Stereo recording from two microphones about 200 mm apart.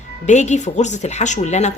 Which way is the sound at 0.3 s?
35° left (ahead or behind).